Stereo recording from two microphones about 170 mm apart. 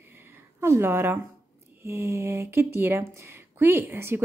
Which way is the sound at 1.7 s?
15° right (ahead or behind).